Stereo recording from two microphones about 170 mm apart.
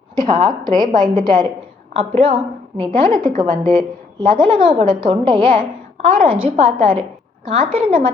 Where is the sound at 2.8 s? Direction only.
25° right (ahead or behind).